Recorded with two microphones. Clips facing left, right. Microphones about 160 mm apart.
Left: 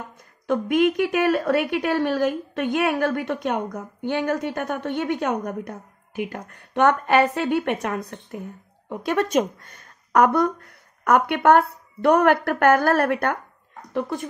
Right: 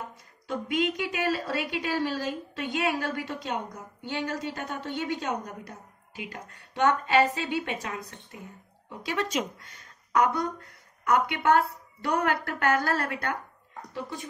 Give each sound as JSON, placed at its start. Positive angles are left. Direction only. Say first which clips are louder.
{"t": 0.5, "sound": "a woman's voice", "louder": "left 9 dB", "side_deg": 55}